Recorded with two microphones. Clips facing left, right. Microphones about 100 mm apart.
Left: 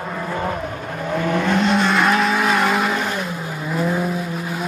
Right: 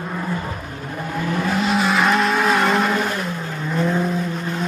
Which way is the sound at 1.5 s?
5° right (ahead or behind).